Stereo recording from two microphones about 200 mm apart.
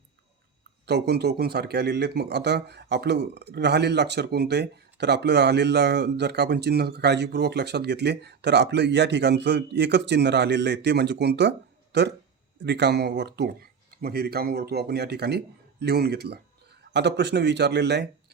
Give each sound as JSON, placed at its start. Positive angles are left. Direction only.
{"t": 0.9, "sound": "speech", "side_deg": -55}